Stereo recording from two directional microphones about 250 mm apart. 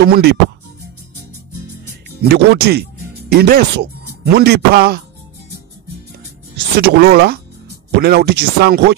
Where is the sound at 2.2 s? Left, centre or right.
Right.